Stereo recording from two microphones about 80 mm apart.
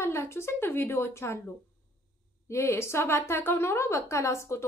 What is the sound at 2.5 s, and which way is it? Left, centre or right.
A woman's voice, left.